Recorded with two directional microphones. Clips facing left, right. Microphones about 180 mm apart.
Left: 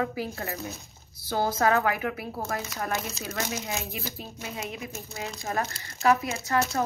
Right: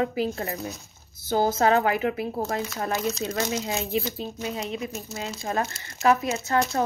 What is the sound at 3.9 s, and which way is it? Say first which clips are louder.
Speech: right 9 dB; 30° right (ahead or behind).